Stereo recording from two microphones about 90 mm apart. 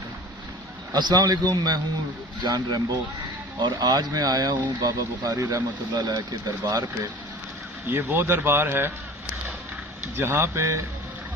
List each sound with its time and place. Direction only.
0.9 s speech: 50° right (ahead or behind)
5.3 s speech: 35° right (ahead or behind)
7.9 s speech: 25° right (ahead or behind)
10.2 s speech: 30° right (ahead or behind)